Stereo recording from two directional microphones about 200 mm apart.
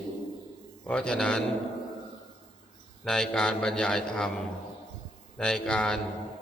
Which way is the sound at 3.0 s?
Centre (ahead or behind).